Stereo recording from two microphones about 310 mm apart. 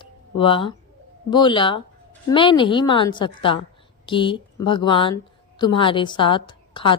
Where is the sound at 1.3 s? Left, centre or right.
Centre.